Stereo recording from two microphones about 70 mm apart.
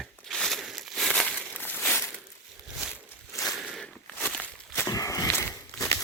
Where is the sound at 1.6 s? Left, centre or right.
Left.